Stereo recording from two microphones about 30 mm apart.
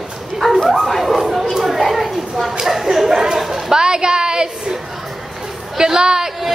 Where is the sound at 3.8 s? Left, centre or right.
Right.